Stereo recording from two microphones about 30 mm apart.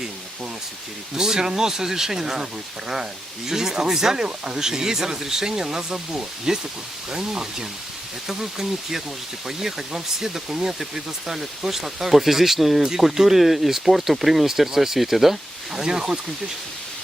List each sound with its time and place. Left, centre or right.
1.1 s speech: centre
15.8 s speech: centre